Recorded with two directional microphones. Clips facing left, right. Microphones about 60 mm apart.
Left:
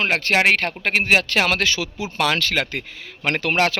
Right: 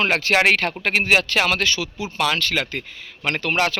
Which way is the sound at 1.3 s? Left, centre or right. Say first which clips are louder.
Even; left.